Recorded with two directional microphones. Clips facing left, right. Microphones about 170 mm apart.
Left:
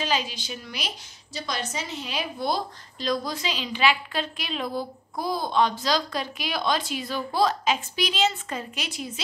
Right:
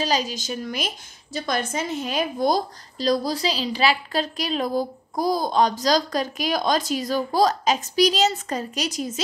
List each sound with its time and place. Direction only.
0.0 s a woman's voice: 40° right (ahead or behind)